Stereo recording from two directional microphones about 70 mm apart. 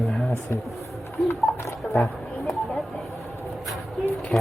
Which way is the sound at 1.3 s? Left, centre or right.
Left.